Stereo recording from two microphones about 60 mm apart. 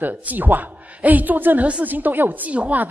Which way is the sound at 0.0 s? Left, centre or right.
Right.